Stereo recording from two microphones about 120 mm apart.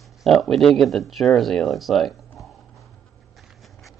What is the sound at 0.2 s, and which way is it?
Speech, centre (ahead or behind).